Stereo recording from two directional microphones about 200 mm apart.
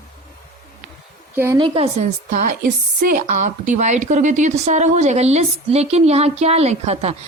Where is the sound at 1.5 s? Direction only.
25° right (ahead or behind).